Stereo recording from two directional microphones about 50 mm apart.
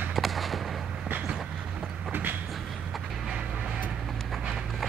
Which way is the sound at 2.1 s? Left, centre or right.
Right.